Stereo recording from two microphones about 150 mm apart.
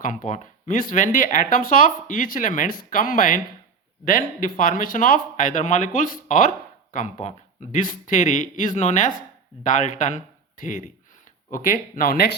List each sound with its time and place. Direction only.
0.0 s speech: 60° left (ahead or behind); by 12.4 s 90° left